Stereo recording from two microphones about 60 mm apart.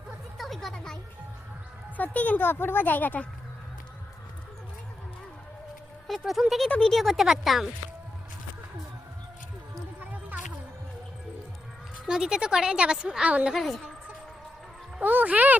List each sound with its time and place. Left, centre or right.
0.3 s a sound: centre
2.0 s speech: left
6.1 s speech: centre
6.7 s speech: centre
6.9 s speech: centre
10.0 s music: right
12.0 s a woman's voice: centre
13.5 s speech: centre
15.0 s speech: right